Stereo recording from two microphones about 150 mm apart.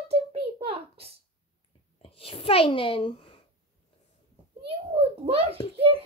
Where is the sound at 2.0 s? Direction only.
40° left (ahead or behind).